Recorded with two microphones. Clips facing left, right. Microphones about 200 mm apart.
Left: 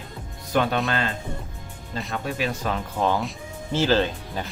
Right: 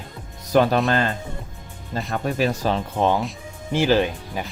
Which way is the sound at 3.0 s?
20° right (ahead or behind).